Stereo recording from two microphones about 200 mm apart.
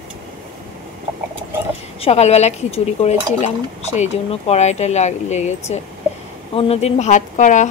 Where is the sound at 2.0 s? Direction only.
30° left (ahead or behind).